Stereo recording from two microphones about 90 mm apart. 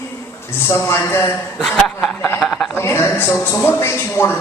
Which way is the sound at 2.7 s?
25° left (ahead or behind).